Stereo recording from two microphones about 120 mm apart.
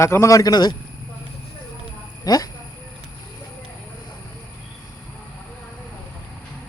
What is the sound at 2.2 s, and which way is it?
Speech, 30° left (ahead or behind).